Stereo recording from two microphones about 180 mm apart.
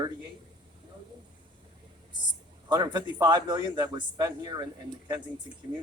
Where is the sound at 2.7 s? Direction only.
25° right (ahead or behind).